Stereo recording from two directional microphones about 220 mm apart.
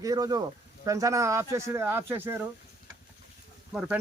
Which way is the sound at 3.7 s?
5° right (ahead or behind).